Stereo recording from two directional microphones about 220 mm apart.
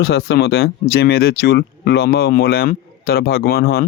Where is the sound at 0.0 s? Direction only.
50° left (ahead or behind).